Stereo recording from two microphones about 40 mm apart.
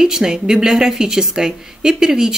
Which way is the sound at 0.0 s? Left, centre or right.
Centre.